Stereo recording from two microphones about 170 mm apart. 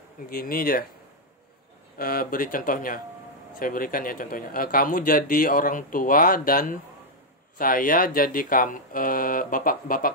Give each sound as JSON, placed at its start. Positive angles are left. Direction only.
{"t": 0.3, "sound": "a man's voice", "side_deg": 60}
{"t": 2.0, "sound": "a man's voice", "side_deg": 60}